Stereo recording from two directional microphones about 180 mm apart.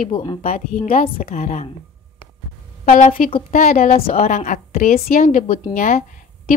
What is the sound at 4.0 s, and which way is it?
Speech, 30° left (ahead or behind).